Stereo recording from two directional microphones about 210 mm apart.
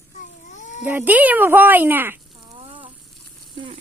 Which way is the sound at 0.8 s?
10° right (ahead or behind).